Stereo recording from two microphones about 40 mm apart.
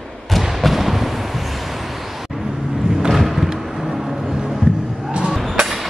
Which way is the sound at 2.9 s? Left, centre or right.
Centre.